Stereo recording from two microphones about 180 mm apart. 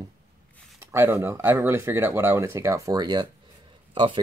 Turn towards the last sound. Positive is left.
turn(degrees=-30)  # may be behind; listen again after turning